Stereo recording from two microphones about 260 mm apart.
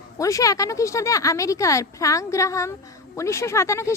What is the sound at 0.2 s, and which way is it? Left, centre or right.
Speech, centre.